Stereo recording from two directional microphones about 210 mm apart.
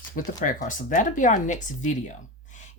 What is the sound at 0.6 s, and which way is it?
Speech, 40° left (ahead or behind).